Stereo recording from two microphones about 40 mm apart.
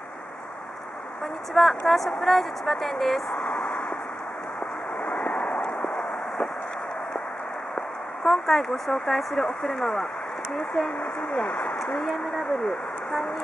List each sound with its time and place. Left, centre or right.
1.5 s a woman's voice: centre
3.4 s a sound: left
5.0 s vehicle: left
7.7 s a sound: centre
9.3 s speech: centre
11.3 s speech: left
12.0 s a woman's voice: centre